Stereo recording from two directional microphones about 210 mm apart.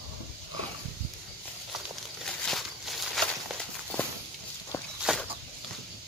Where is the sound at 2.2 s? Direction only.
Centre (ahead or behind).